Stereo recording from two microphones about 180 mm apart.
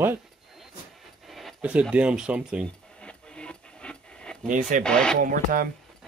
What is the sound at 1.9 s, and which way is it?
Speech, 5° right (ahead or behind).